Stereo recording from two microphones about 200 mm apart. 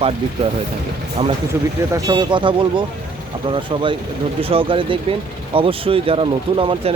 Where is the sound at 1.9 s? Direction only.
20° right (ahead or behind).